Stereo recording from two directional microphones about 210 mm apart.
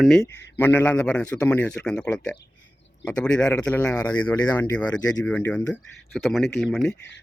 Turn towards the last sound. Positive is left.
turn(degrees=0)  # may be behind; listen again after turning